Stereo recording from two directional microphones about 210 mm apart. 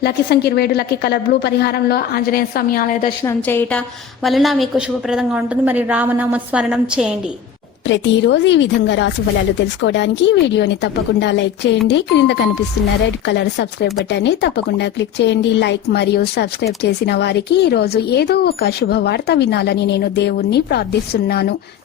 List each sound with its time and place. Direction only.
0.0 s speech: 50° left (ahead or behind)
3.2 s a woman's voice: 10° left (ahead or behind)
7.9 s speech: 60° left (ahead or behind)